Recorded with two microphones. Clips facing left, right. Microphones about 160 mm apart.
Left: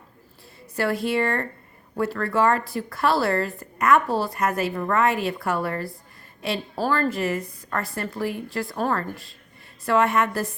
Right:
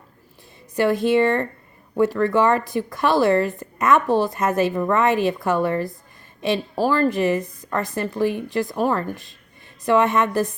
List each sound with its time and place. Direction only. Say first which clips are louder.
0.8 s a woman's voice: right 6 dB; 20° right (ahead or behind)